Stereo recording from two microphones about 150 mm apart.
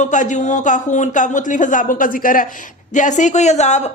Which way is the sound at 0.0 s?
55° left (ahead or behind).